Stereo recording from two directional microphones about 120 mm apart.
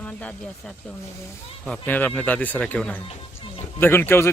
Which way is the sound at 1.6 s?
10° left (ahead or behind).